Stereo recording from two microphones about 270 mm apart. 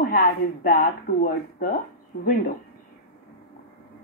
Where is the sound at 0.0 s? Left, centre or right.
Left.